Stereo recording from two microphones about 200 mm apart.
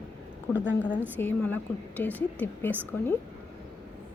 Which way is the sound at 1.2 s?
10° left (ahead or behind).